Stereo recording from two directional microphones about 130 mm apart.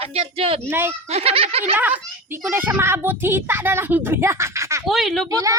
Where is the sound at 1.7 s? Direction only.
15° right (ahead or behind).